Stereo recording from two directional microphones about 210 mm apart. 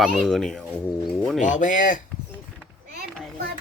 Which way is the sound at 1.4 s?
35° left (ahead or behind).